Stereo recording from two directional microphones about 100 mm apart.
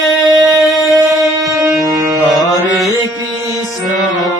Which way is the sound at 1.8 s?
35° right (ahead or behind).